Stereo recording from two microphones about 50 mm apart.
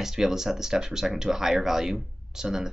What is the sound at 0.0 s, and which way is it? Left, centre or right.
Speech, centre.